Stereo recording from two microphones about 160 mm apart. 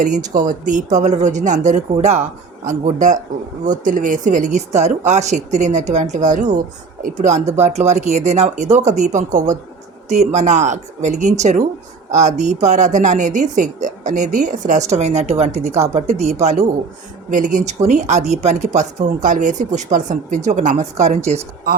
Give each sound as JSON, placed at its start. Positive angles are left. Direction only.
{"t": 0.0, "sound": "speech", "side_deg": -50}